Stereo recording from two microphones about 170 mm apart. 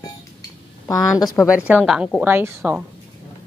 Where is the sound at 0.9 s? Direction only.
20° left (ahead or behind).